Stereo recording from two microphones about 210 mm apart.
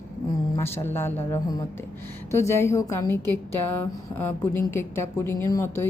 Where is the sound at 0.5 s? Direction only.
10° left (ahead or behind).